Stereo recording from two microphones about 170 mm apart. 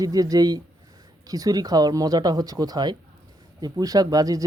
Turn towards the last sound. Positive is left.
turn(degrees=-20)  # may be behind; listen again after turning